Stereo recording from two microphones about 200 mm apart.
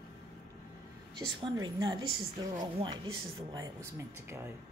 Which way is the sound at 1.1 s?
20° right (ahead or behind).